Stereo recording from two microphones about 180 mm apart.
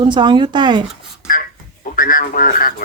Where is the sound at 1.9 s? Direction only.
50° left (ahead or behind).